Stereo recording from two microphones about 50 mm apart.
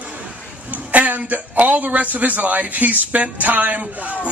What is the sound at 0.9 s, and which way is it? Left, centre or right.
A man's voice, right.